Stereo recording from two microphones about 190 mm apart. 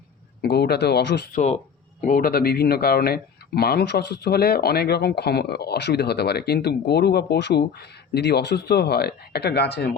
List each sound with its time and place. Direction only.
0.4 s speech: 60° left (ahead or behind)
2.0 s speech: 50° left (ahead or behind)